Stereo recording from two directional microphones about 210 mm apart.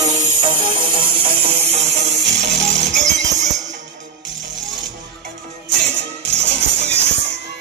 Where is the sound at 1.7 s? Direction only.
55° right (ahead or behind).